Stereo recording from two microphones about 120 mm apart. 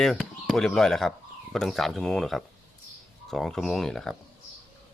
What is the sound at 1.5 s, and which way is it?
Speech, 5° left (ahead or behind).